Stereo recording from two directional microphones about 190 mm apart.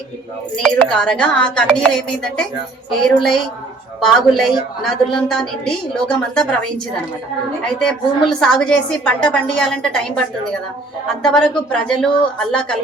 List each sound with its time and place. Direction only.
0.5 s a woman's voice: 5° left (ahead or behind)
4.0 s a woman's voice: centre (ahead or behind)